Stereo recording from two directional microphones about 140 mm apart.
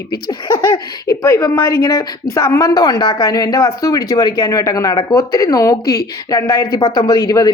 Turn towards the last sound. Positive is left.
turn(degrees=25)  # may be behind; listen again after turning